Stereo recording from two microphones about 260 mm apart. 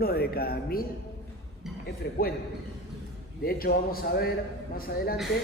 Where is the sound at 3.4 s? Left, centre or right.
Left.